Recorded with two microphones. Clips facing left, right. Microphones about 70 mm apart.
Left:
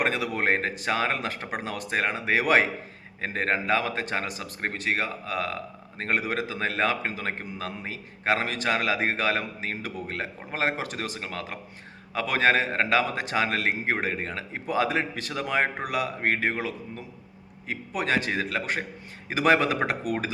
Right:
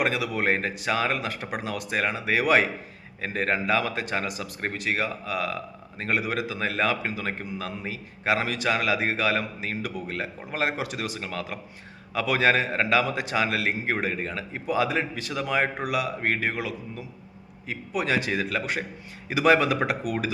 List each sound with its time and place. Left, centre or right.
0.0 s a man's voice: left